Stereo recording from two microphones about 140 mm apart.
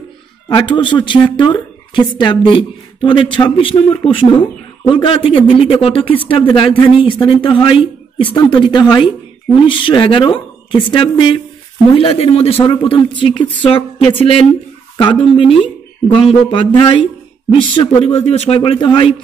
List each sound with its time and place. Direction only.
0.5 s a woman's voice: 35° left (ahead or behind)
17.7 s a woman's voice: 50° left (ahead or behind)